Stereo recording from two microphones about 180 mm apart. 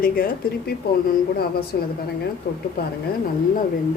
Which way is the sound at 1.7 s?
55° left (ahead or behind).